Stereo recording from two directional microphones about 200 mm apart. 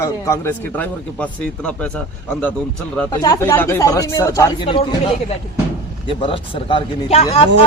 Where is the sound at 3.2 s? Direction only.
15° left (ahead or behind).